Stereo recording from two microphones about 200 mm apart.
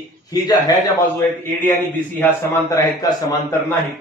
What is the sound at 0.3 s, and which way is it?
A man's voice, 20° left (ahead or behind).